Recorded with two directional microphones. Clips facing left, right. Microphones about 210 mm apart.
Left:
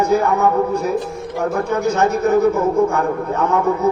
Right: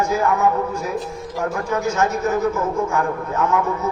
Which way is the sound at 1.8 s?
35° left (ahead or behind).